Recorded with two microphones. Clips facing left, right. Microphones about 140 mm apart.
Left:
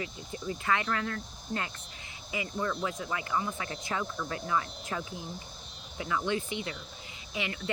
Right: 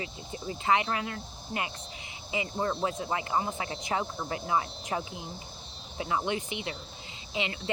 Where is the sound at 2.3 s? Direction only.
30° right (ahead or behind).